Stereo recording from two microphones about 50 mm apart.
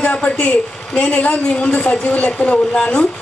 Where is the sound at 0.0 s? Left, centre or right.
Left.